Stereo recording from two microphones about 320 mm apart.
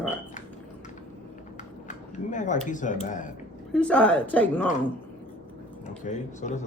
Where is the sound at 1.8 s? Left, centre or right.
Left.